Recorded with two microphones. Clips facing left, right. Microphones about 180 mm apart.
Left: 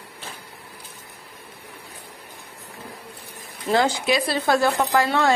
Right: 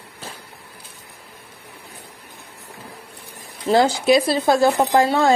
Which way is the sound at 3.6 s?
35° right (ahead or behind).